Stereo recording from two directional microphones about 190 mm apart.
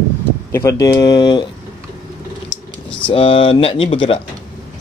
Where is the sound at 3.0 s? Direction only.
30° left (ahead or behind).